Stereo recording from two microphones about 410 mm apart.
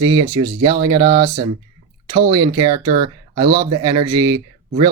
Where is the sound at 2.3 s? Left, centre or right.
Centre.